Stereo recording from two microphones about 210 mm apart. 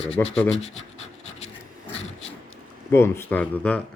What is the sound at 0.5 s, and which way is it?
Scratch, 30° left (ahead or behind).